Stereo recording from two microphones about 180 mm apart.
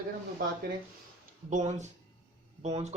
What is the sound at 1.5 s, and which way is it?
Speech, 40° right (ahead or behind).